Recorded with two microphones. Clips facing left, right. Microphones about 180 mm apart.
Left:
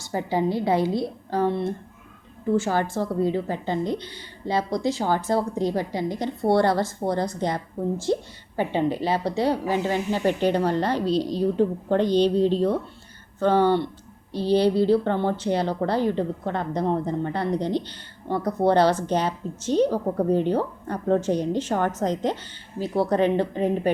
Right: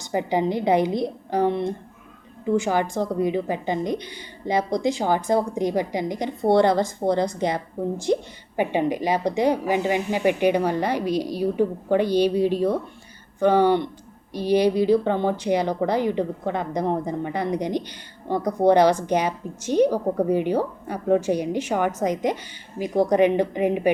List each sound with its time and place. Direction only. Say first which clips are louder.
0.0 s a woman's voice: right 2 dB; 15° right (ahead or behind)